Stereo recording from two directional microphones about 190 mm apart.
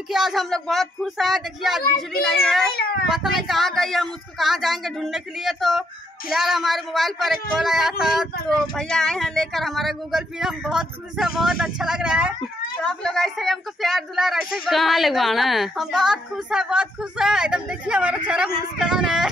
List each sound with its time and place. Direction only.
0.1 s speech: centre (ahead or behind)